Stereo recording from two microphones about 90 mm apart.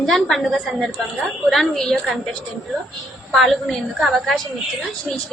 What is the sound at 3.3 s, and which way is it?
A woman's voice, centre (ahead or behind).